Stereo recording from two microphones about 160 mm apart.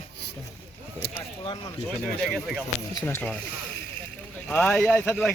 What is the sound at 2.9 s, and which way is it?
Speech, 15° left (ahead or behind).